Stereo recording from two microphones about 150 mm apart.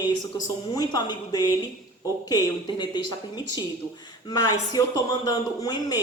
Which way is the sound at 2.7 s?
30° left (ahead or behind).